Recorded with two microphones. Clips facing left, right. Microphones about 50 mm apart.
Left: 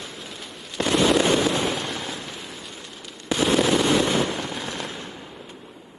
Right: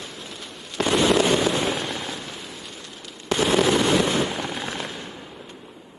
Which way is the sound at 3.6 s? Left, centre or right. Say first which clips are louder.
Even; centre.